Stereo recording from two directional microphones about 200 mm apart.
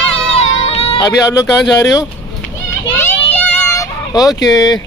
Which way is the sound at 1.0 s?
15° left (ahead or behind).